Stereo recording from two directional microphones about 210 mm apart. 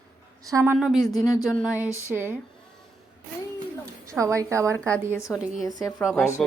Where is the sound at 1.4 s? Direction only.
5° left (ahead or behind).